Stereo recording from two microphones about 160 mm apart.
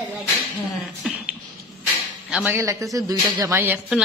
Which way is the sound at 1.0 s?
5° right (ahead or behind).